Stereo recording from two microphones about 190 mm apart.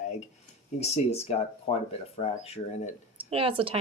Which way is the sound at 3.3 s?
30° right (ahead or behind).